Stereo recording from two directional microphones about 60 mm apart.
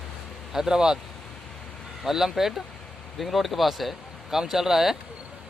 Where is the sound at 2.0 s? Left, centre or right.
Centre.